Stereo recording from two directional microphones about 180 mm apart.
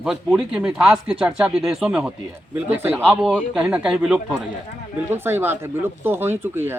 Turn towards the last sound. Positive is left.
turn(degrees=-10)  # may be behind; listen again after turning